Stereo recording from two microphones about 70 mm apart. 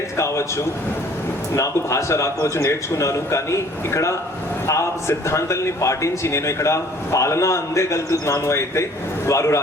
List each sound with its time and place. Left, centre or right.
0.2 s a man's voice: left